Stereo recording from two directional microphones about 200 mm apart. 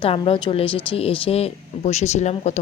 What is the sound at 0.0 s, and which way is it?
A woman's voice, 25° left (ahead or behind).